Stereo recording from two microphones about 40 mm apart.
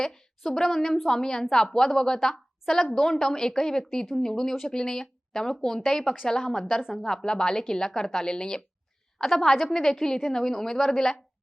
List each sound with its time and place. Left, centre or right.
0.0 s a woman's voice: centre
9.1 s speech: centre